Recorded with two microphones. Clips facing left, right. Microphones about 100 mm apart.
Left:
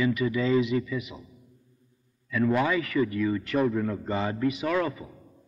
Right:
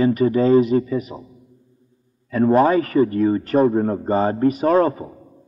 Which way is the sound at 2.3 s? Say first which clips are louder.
Right 9 dB; 40° right (ahead or behind).